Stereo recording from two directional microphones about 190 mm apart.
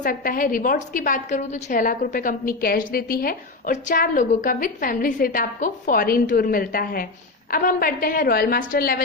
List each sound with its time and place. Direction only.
0.0 s a woman's voice: 45° left (ahead or behind)